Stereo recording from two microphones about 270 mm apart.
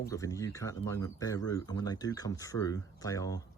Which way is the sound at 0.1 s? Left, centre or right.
Centre.